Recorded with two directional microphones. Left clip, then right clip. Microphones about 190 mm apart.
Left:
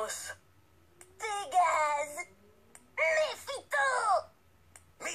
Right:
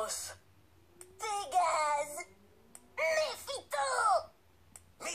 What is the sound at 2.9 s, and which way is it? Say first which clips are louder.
Wail: left 3 dB; 20° left (ahead or behind).